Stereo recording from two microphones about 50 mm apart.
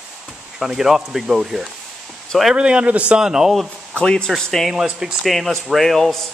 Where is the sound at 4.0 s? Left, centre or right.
Centre.